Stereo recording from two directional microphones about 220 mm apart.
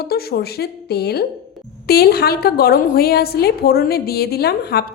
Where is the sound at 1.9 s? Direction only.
45° left (ahead or behind).